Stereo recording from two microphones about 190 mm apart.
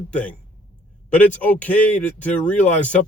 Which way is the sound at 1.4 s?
10° left (ahead or behind).